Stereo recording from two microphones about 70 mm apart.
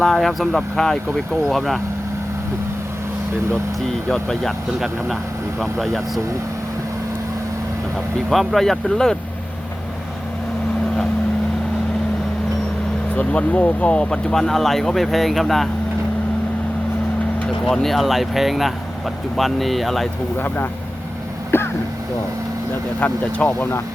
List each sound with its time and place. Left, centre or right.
0.0 s speech: centre
4.1 s speech: centre
5.5 s speech: centre
8.3 s speech: centre
13.1 s speech: centre
17.7 s speech: centre
21.5 s vehicle: left
23.0 s speech: left